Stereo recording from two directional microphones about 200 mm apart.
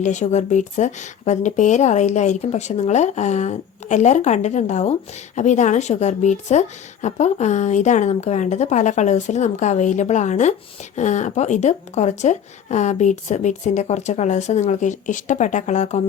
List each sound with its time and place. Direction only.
0.0 s speech: 35° left (ahead or behind)